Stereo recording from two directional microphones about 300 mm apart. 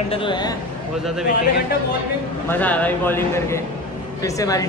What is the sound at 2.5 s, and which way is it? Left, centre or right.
A man's voice, centre.